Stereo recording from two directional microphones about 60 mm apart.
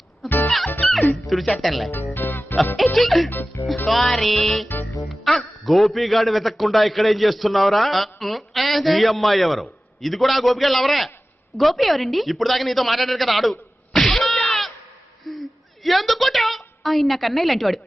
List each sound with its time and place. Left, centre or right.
0.2 s music: centre
1.3 s a man's voice: centre
2.1 s music: left
2.9 s a man's voice: centre
15.3 s a sound: centre
15.8 s a woman's voice: centre